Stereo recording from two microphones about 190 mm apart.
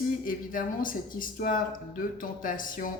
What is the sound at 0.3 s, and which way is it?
Speech, 45° left (ahead or behind).